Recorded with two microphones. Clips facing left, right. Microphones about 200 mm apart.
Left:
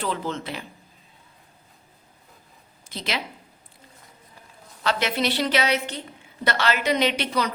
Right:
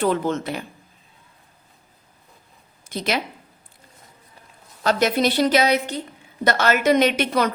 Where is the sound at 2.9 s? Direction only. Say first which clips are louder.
Right 6 dB; 45° right (ahead or behind).